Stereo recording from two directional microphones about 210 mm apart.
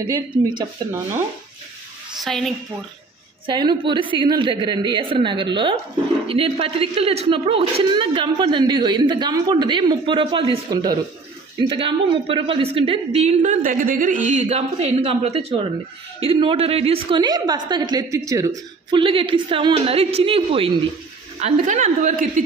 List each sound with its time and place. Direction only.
0.0 s a woman's voice: 20° right (ahead or behind)
2.2 s a woman's voice: centre (ahead or behind)
3.4 s a woman's voice: 20° right (ahead or behind); by 22.4 s 40° right (ahead or behind)